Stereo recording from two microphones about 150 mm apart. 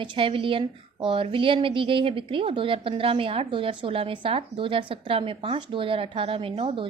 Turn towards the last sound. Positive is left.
turn(degrees=-35)  # may be behind; listen again after turning